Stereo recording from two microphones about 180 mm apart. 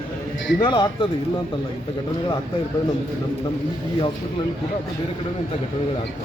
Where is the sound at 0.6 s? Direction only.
25° left (ahead or behind).